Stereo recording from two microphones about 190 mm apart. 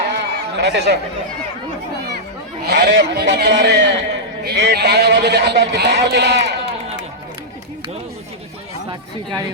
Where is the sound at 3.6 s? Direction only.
65° right (ahead or behind).